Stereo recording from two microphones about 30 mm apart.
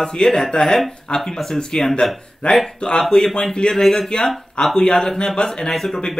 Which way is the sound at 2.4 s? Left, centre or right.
Left.